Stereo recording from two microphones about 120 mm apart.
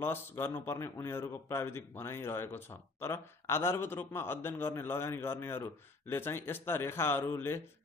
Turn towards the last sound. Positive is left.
turn(degrees=20)  # may be behind; listen again after turning